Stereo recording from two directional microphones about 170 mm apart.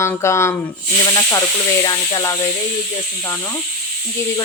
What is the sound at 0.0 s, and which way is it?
Speech, 15° left (ahead or behind).